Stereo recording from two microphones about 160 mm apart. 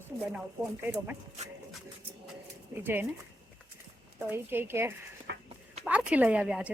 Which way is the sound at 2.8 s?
10° right (ahead or behind).